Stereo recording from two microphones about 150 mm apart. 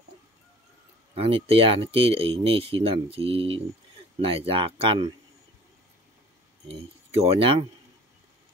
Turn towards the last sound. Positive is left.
turn(degrees=-40)  # may be behind; listen again after turning